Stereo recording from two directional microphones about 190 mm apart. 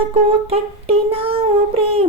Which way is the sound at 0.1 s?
30° right (ahead or behind).